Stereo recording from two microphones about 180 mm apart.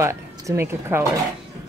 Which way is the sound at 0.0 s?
15° right (ahead or behind).